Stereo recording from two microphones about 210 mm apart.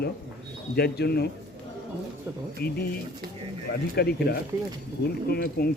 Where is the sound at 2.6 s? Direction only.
45° left (ahead or behind).